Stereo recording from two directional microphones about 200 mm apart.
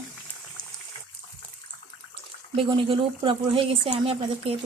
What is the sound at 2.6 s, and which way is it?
A woman's voice, 25° right (ahead or behind).